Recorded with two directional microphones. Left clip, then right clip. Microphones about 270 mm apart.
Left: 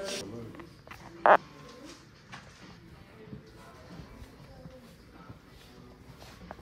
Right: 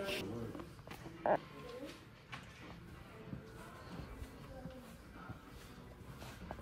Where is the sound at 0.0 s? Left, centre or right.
Left.